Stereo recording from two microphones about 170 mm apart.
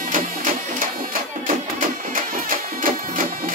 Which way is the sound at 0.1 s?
50° right (ahead or behind).